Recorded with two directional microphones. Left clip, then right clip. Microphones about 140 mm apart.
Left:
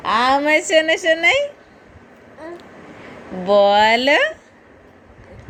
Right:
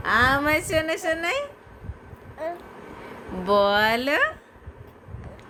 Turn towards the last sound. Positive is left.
turn(degrees=20)  # may be behind; listen again after turning